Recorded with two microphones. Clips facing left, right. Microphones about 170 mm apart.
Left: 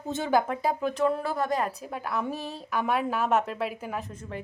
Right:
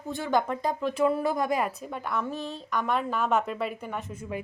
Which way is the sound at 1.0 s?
10° right (ahead or behind).